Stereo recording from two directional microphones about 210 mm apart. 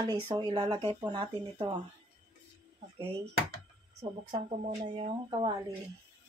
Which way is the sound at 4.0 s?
25° right (ahead or behind).